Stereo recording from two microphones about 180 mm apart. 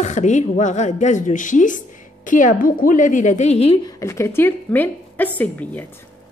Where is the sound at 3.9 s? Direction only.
15° left (ahead or behind).